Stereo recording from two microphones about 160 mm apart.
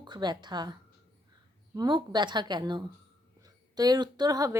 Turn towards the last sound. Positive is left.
turn(degrees=-20)  # may be behind; listen again after turning